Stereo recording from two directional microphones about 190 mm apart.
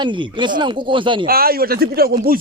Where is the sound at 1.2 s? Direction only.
50° right (ahead or behind).